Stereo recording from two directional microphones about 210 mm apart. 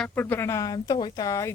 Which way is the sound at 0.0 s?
10° left (ahead or behind).